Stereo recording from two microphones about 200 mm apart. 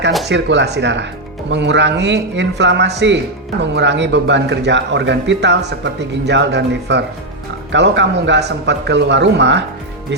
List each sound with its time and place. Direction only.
0.3 s a man's voice: 60° right (ahead or behind)